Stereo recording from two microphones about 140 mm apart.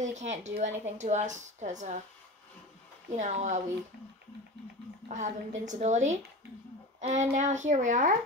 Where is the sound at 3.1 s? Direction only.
55° right (ahead or behind).